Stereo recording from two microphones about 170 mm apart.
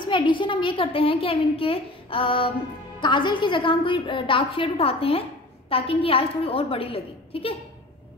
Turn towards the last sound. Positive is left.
turn(degrees=35)  # may be behind; listen again after turning